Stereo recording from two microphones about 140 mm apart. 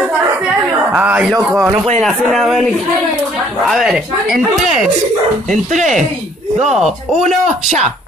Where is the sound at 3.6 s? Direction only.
Centre (ahead or behind).